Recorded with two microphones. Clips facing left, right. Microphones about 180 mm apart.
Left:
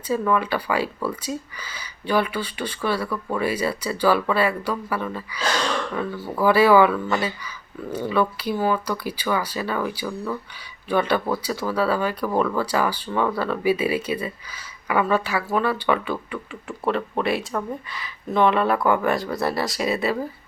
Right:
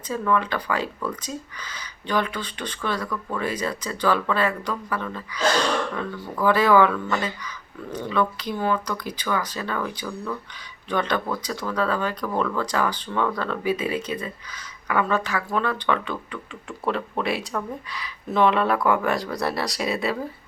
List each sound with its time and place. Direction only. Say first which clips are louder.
0.1 s speech: left 2 dB; 10° left (ahead or behind)